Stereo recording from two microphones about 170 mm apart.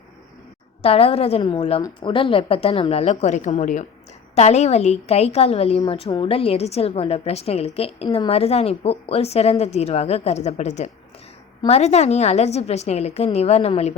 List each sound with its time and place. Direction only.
0.8 s a woman's voice: 35° left (ahead or behind)